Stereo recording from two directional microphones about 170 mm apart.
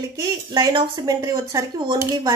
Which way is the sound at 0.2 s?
25° right (ahead or behind).